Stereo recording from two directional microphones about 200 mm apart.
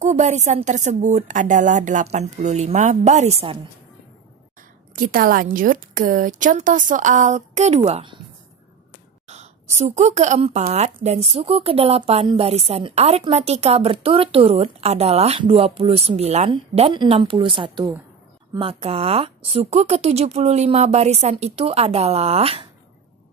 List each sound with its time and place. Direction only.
0.0 s speech: 35° right (ahead or behind)
4.6 s speech: 45° right (ahead or behind); by 8.2 s 25° right (ahead or behind)
9.3 s a woman's voice: 35° right (ahead or behind)